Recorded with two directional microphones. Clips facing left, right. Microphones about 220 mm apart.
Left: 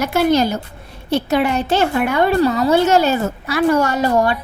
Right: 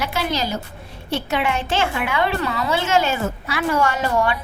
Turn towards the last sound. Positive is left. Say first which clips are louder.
# left 5 dB
turn(degrees=40)  # may be behind; listen again after turning